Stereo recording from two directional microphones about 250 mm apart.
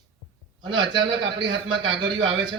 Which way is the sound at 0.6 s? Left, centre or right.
Centre.